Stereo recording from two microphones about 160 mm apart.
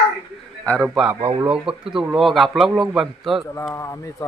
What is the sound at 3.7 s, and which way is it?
Speech, 20° left (ahead or behind).